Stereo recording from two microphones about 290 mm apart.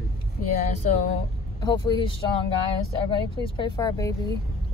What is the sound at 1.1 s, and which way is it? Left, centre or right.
Speech, centre.